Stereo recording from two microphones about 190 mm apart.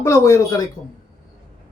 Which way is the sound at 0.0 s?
15° left (ahead or behind).